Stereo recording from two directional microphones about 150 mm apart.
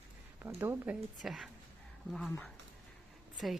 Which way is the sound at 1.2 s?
Centre (ahead or behind).